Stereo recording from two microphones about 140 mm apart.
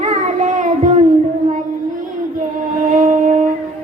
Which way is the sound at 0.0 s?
60° right (ahead or behind).